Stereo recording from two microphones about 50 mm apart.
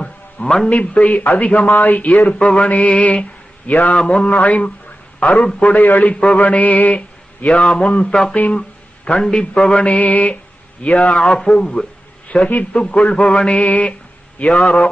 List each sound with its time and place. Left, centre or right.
0.0 s music: centre
0.7 s a man's voice: left
2.3 s a man's voice: centre
2.7 s a man's voice: left
4.0 s a man's voice: centre
5.6 s a man's voice: left
7.4 s a man's voice: centre
9.8 s a man's voice: left; by 11.9 s centre
12.3 s a man's voice: left
13.5 s a man's voice: left
14.5 s a man's voice: centre